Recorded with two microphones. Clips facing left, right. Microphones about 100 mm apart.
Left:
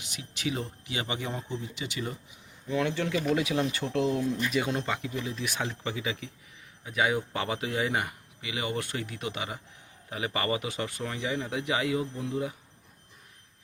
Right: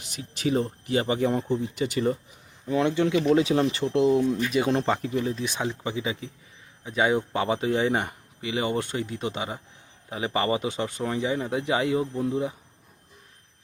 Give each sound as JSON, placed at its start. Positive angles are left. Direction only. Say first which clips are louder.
{"t": 0.0, "sound": "speech", "louder": "right 6 dB", "side_deg": -40}
{"t": 2.6, "sound": "speech", "louder": "right 6 dB", "side_deg": -25}
{"t": 3.3, "sound": "speech", "louder": "right 5 dB", "side_deg": -30}
{"t": 3.7, "sound": "speech", "louder": "right 6 dB", "side_deg": -20}
{"t": 4.7, "sound": "speech", "louder": "right 7 dB", "side_deg": -40}
{"t": 5.4, "sound": "speech", "louder": "right 4 dB", "side_deg": -20}